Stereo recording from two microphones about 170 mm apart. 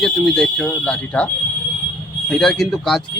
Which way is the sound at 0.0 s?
5° left (ahead or behind).